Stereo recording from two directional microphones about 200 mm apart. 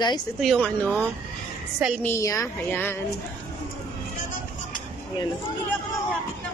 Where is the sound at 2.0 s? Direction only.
15° left (ahead or behind).